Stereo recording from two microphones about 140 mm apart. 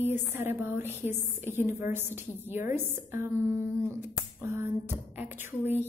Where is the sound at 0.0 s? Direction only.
15° right (ahead or behind).